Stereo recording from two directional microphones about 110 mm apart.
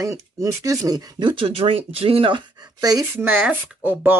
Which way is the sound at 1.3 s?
55° right (ahead or behind).